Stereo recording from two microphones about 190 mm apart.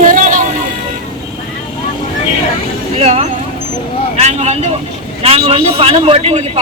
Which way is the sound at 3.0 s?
30° right (ahead or behind).